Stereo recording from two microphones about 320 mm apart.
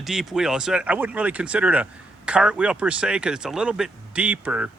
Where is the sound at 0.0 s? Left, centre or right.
Centre.